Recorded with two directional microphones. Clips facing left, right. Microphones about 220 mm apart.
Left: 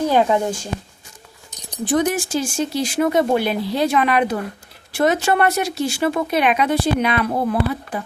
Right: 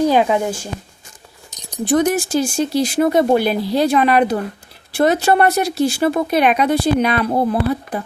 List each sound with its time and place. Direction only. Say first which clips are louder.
0.1 s speech: right 1 dB; 15° right (ahead or behind)
1.9 s speech: right 3 dB; 45° right (ahead or behind)